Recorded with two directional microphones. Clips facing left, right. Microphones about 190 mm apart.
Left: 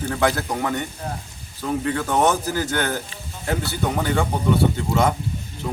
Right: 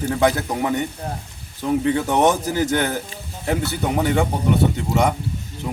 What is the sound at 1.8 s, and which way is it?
Speech, 20° right (ahead or behind).